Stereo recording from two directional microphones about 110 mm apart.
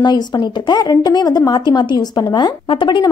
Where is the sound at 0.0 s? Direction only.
40° left (ahead or behind).